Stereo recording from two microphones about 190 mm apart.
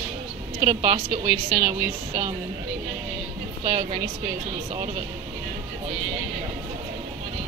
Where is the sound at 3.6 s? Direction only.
30° right (ahead or behind).